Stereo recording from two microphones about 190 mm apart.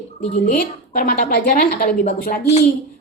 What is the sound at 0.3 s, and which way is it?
A woman's voice, 45° left (ahead or behind).